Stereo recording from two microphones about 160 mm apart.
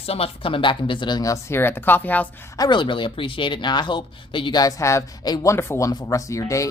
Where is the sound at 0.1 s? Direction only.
35° left (ahead or behind); by 2.2 s 10° left (ahead or behind).